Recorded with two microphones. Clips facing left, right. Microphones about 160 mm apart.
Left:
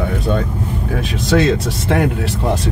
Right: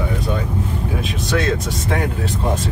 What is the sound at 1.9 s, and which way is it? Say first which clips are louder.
Speech: left 5 dB; 80° left.